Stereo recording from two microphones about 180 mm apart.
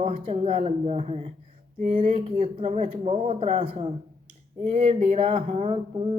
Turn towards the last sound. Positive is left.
turn(degrees=-30)  # may be behind; listen again after turning